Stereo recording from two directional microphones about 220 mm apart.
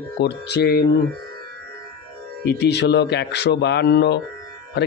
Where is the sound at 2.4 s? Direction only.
50° left (ahead or behind).